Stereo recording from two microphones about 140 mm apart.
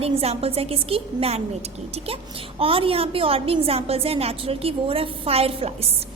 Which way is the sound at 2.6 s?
40° right (ahead or behind).